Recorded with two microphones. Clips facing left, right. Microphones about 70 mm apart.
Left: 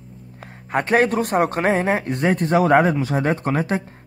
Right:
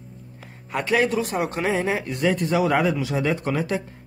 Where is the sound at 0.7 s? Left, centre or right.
Left.